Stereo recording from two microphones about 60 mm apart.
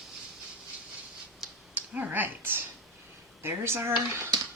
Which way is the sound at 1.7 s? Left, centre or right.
Right.